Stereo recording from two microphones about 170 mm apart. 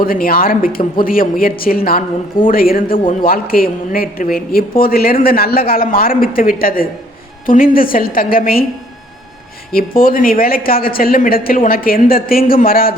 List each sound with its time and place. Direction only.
0.0 s speech: 60° left (ahead or behind)
9.7 s speech: 55° left (ahead or behind)